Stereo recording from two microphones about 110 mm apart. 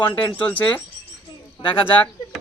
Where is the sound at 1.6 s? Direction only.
50° left (ahead or behind).